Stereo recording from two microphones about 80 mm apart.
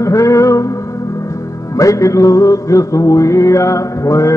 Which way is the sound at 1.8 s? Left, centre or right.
Left.